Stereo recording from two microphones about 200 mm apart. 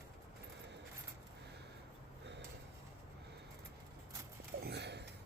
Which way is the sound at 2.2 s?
60° right (ahead or behind).